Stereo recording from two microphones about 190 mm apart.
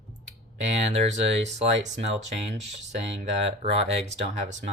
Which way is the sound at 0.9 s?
35° right (ahead or behind).